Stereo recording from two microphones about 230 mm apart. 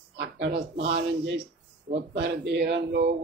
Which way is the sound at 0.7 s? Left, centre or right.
Right.